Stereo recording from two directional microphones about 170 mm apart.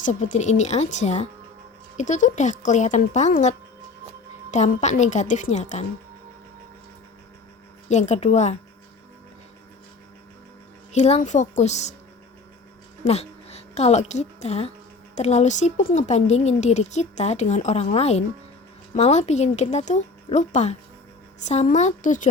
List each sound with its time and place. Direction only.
0.0 s speech: 45° left (ahead or behind)
4.5 s speech: 45° left (ahead or behind)
7.9 s speech: 40° left (ahead or behind)
10.9 s speech: 40° left (ahead or behind)
13.1 s a woman's voice: 40° left (ahead or behind)